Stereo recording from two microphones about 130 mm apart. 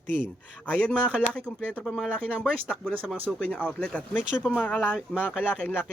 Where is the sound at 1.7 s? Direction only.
10° left (ahead or behind).